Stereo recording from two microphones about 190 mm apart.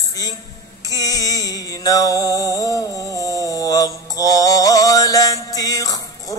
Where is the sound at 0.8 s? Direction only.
20° left (ahead or behind).